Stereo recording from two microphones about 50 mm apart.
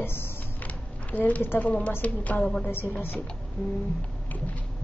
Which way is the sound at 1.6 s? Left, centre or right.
Left.